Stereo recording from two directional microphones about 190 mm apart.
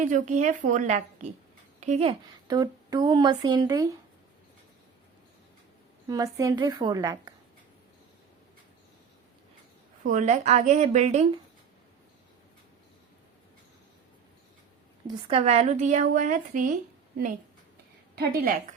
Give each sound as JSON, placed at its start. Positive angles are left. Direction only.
{"t": 0.0, "sound": "a woman's voice", "side_deg": -40}
{"t": 2.5, "sound": "speech", "side_deg": -20}
{"t": 6.1, "sound": "speech", "side_deg": -20}
{"t": 10.0, "sound": "a woman's voice", "side_deg": -45}
{"t": 15.0, "sound": "a woman's voice", "side_deg": -30}
{"t": 18.1, "sound": "a woman's voice", "side_deg": -50}